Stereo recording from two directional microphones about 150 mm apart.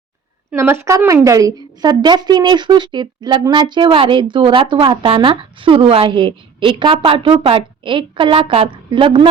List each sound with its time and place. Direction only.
0.5 s a woman's voice: 15° right (ahead or behind); by 9.3 s 35° right (ahead or behind)